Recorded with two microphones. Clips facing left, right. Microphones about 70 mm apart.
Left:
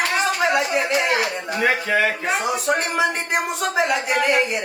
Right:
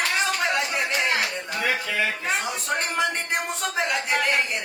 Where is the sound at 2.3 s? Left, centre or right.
Centre.